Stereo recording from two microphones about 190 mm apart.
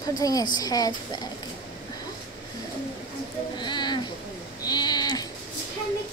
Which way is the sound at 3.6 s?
25° left (ahead or behind).